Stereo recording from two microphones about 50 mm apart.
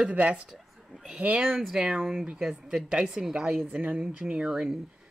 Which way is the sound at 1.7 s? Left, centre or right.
Centre.